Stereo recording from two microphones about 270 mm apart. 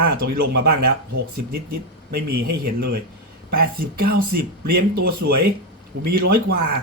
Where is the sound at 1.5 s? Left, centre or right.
Right.